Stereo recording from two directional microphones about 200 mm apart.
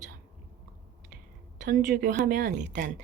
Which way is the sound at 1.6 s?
40° right (ahead or behind).